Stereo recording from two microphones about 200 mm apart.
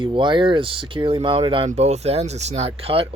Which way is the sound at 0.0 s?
25° right (ahead or behind).